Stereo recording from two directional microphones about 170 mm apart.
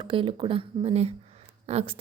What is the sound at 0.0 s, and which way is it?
A woman's voice, 30° right (ahead or behind).